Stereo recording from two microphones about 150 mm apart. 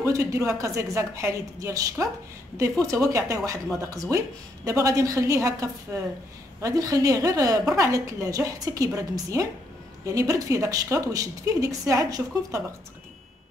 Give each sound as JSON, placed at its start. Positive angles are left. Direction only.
{"t": 0.0, "sound": "a woman's voice", "side_deg": -20}